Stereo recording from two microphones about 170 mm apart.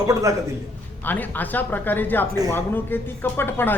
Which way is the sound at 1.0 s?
10° left (ahead or behind).